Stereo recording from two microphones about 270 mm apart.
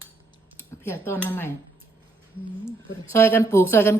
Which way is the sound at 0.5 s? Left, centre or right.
Centre.